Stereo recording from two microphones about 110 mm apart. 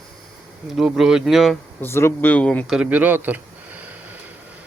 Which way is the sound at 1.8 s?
25° left (ahead or behind).